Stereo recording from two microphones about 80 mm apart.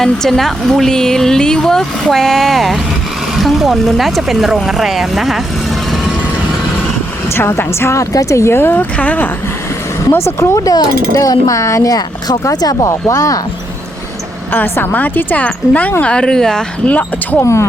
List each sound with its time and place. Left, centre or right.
0.0 s speech: centre
7.3 s speech: left
10.1 s speech: left
10.7 s speech: left
14.5 s speech: left
17.4 s speech: left